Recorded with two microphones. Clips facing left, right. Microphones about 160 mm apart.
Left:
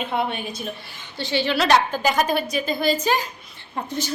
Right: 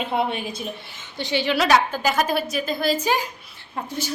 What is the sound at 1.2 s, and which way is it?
A woman's voice, 15° right (ahead or behind).